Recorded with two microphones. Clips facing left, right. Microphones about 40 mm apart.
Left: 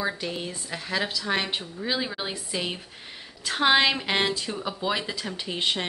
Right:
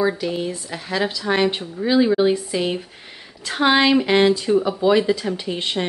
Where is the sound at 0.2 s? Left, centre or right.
Centre.